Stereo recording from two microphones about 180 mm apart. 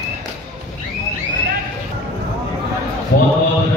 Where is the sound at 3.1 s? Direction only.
60° left (ahead or behind).